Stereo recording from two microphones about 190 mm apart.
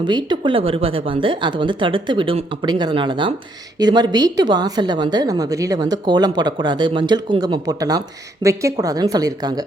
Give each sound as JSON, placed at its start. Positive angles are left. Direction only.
{"t": 0.0, "sound": "a woman's voice", "side_deg": -25}